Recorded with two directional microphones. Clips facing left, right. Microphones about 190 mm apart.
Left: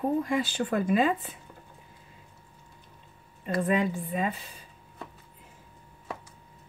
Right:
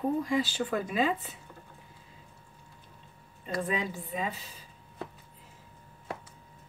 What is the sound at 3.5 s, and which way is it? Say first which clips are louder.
Speech: left 6 dB; 55° left (ahead or behind).